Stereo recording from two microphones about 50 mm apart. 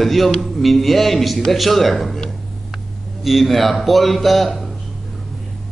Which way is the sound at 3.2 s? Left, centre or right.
Centre.